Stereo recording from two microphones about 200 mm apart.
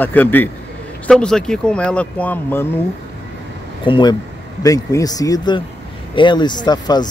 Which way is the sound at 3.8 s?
25° left (ahead or behind).